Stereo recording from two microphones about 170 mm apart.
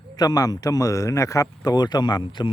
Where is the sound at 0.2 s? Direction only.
20° left (ahead or behind).